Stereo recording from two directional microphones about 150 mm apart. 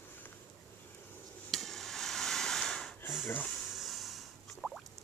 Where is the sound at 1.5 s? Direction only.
Centre (ahead or behind).